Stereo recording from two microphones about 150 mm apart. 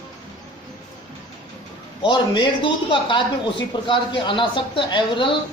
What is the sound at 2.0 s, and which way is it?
Speech, 35° left (ahead or behind).